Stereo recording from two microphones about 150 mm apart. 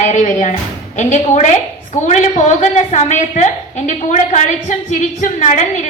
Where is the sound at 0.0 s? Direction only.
55° left (ahead or behind).